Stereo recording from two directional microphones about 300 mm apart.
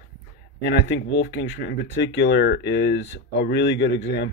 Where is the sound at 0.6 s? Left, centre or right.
Left.